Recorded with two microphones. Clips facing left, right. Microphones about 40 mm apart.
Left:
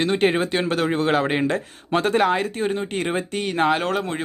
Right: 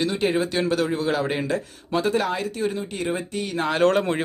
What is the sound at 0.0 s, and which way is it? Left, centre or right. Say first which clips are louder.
A man's voice: left 3 dB; left.